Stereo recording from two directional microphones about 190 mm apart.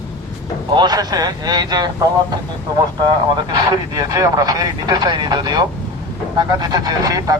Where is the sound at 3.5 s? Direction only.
20° right (ahead or behind).